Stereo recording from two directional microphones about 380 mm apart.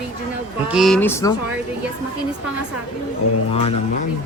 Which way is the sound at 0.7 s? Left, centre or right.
Centre.